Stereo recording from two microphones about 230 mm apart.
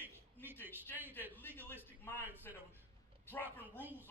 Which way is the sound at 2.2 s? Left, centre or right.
Centre.